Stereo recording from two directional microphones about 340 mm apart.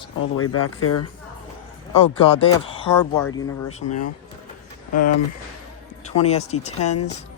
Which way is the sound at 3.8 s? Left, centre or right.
Left.